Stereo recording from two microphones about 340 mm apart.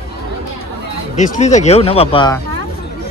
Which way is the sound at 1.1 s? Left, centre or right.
Left.